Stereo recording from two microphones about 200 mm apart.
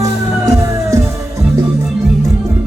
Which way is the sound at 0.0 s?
15° right (ahead or behind).